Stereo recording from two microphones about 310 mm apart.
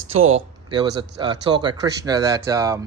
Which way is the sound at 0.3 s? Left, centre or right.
Centre.